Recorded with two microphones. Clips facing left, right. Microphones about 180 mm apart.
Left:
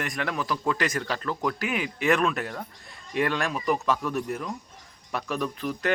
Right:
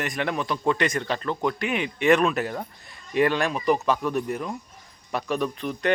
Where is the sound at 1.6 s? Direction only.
5° left (ahead or behind).